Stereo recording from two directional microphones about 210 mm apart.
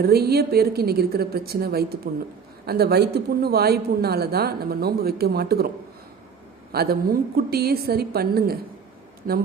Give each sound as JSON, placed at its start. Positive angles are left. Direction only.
{"t": 0.0, "sound": "speech", "side_deg": -50}
{"t": 6.7, "sound": "speech", "side_deg": -45}